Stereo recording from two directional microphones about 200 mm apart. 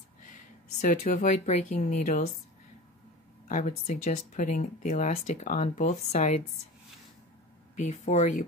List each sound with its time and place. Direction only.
0.7 s speech: 40° left (ahead or behind)
3.4 s speech: 40° left (ahead or behind)
7.7 s speech: 35° left (ahead or behind)